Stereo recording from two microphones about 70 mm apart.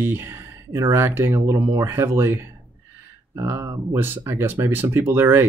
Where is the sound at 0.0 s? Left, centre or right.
Right.